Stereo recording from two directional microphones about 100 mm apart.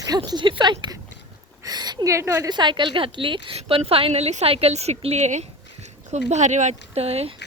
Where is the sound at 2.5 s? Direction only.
50° right (ahead or behind); by 5.5 s 90° right.